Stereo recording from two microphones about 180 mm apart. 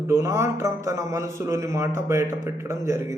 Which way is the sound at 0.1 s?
15° right (ahead or behind).